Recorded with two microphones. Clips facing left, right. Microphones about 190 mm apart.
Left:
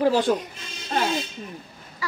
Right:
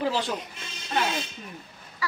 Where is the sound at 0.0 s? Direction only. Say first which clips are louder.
Left 7 dB; 50° left (ahead or behind).